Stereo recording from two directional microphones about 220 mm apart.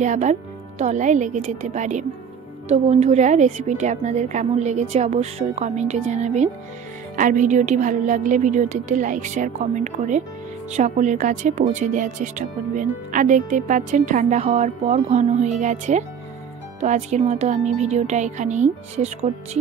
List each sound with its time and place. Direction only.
0.0 s speech: 35° right (ahead or behind)